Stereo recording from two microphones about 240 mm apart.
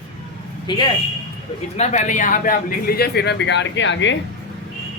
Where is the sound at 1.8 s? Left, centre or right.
Left.